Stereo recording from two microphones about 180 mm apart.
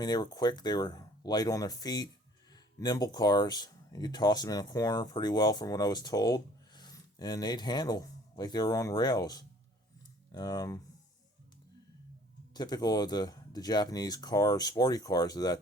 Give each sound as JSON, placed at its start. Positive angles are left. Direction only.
{"t": 0.0, "sound": "speech", "side_deg": 20}
{"t": 12.5, "sound": "speech", "side_deg": 25}